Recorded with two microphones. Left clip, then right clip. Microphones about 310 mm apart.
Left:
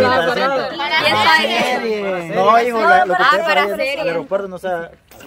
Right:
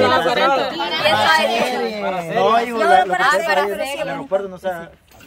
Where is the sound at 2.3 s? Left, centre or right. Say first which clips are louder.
Left 4 dB; centre.